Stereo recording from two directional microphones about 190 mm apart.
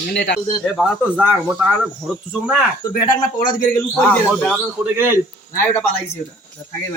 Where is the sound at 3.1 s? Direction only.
20° left (ahead or behind).